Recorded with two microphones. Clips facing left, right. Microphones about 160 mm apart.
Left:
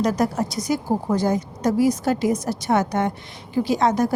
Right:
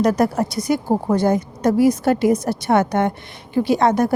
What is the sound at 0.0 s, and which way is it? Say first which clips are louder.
Speech: right 4 dB; 60° right (ahead or behind).